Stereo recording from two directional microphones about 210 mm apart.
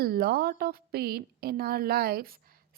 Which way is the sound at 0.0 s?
45° right (ahead or behind).